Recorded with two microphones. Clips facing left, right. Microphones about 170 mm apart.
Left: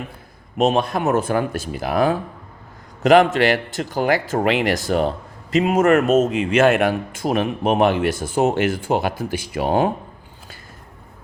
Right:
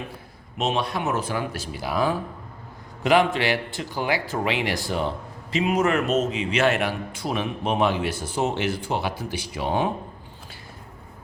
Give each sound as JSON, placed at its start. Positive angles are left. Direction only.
{"t": 0.5, "sound": "speech", "side_deg": 45}
{"t": 3.0, "sound": "speech", "side_deg": 45}